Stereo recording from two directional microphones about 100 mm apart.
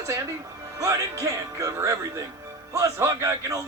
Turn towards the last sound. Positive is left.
turn(degrees=-35)  # may be behind; listen again after turning